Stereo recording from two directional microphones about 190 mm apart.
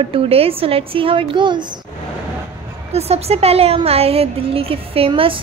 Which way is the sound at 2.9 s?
35° right (ahead or behind).